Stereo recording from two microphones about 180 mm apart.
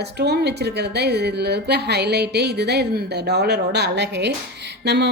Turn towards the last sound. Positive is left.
turn(degrees=-70)  # may be behind; listen again after turning